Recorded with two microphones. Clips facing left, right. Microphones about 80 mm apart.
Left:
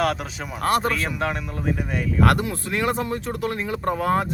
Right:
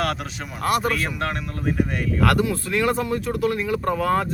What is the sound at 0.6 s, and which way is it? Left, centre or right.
Speech, left.